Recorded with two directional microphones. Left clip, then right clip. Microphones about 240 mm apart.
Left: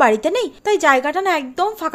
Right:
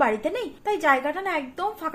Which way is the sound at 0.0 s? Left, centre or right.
Left.